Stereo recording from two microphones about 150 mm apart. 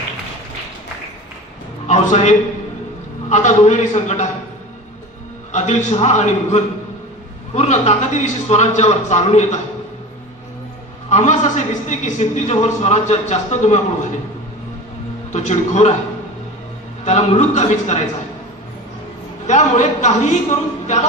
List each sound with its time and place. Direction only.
1.9 s a man's voice: 45° left (ahead or behind)
5.5 s a man's voice: 50° left (ahead or behind)
11.1 s a man's voice: 50° left (ahead or behind)
15.3 s a man's voice: 50° left (ahead or behind)
17.0 s a man's voice: 45° left (ahead or behind)
19.4 s a man's voice: 50° left (ahead or behind)
20.8 s a capella: 50° left (ahead or behind)